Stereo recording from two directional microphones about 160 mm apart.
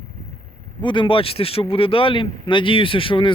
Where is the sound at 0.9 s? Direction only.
30° left (ahead or behind).